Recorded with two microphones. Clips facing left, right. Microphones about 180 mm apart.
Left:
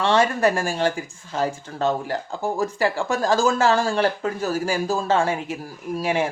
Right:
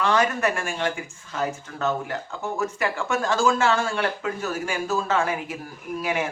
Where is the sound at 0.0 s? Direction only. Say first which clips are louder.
Left 3 dB; 30° left (ahead or behind).